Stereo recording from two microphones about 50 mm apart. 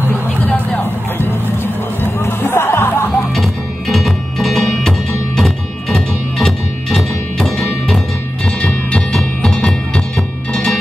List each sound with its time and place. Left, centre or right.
0.1 s music: left
2.1 s music: left
3.9 s music: centre
9.1 s music: centre